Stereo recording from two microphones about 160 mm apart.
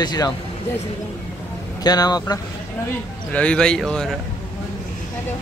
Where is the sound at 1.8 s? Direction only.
25° left (ahead or behind).